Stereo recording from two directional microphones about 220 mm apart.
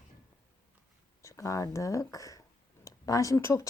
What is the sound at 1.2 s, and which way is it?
Speech, 15° left (ahead or behind).